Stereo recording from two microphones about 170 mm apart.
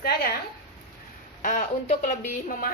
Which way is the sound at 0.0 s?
70° left (ahead or behind).